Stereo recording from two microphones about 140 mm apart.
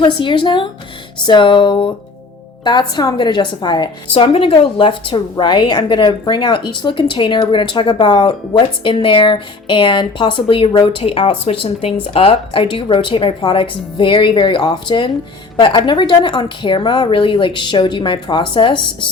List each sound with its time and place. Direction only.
0.0 s a woman's voice: 35° left (ahead or behind)